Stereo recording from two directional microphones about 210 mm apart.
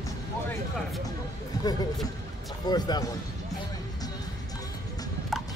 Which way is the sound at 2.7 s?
20° left (ahead or behind).